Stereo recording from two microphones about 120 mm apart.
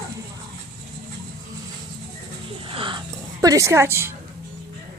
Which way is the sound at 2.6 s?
45° right (ahead or behind).